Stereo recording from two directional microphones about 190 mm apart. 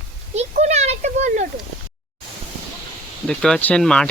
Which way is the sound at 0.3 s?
35° right (ahead or behind).